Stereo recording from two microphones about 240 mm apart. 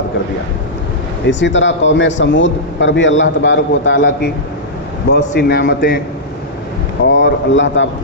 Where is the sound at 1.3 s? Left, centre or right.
Left.